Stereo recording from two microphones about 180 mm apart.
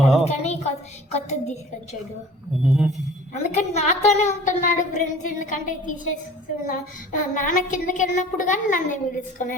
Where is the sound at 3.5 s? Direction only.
40° left (ahead or behind).